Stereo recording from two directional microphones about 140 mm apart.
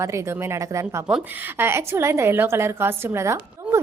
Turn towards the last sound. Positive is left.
turn(degrees=-20)  # may be behind; listen again after turning